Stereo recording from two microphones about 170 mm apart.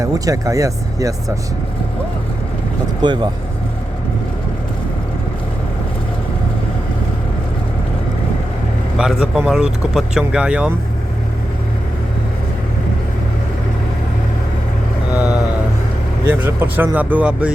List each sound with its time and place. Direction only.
0.0 s speech: 20° right (ahead or behind)
3.0 s speech: 25° right (ahead or behind)
9.0 s speech: 5° right (ahead or behind)
16.2 s speech: 10° right (ahead or behind)